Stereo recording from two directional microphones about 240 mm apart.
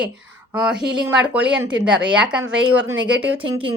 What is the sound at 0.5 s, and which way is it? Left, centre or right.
Speech, centre.